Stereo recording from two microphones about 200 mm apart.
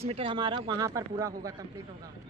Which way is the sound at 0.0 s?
30° right (ahead or behind).